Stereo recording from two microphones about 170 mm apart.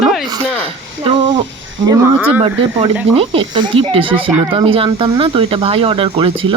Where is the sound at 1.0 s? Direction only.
30° right (ahead or behind).